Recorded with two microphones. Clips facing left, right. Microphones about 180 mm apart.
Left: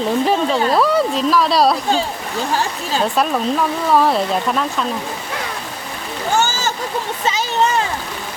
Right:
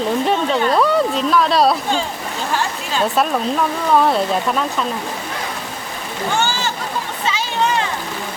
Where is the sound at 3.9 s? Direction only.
Centre (ahead or behind).